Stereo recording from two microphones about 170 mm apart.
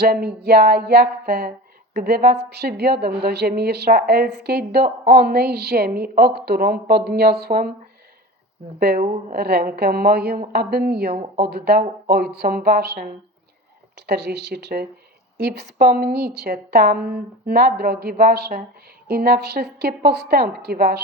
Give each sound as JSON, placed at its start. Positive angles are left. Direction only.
{"t": 0.0, "sound": "speech", "side_deg": -70}
{"t": 8.8, "sound": "speech", "side_deg": -65}